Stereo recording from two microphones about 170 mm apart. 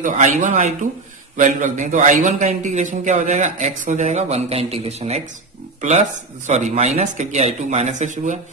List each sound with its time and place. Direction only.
0.0 s a man's voice: 50° right (ahead or behind)